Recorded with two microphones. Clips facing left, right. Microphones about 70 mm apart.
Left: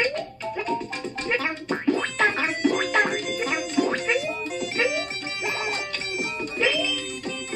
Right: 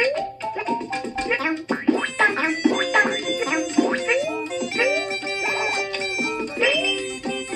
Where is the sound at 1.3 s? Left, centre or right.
Centre.